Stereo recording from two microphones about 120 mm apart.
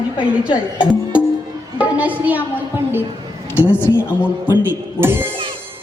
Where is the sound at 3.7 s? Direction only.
20° left (ahead or behind).